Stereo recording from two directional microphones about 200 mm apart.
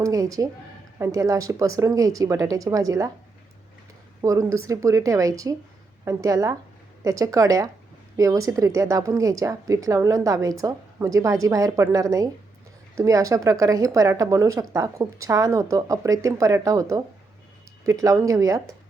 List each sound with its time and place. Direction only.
0.0 s speech: 15° right (ahead or behind)
4.2 s speech: 15° right (ahead or behind)